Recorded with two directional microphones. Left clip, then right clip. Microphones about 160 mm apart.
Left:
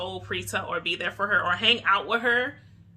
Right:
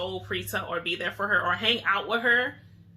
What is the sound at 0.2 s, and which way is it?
A man's voice, 20° left (ahead or behind).